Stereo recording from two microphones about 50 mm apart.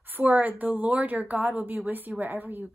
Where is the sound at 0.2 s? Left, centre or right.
Right.